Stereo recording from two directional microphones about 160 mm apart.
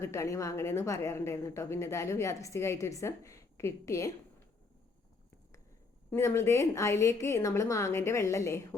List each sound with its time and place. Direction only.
0.0 s a woman's voice: 20° left (ahead or behind)
6.1 s a woman's voice: 15° left (ahead or behind)